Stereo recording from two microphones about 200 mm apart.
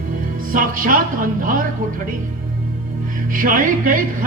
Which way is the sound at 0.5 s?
45° right (ahead or behind).